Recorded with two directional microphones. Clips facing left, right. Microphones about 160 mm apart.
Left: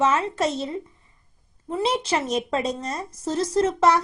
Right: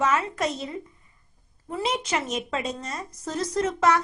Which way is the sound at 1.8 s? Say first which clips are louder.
Left 3 dB; 30° left (ahead or behind).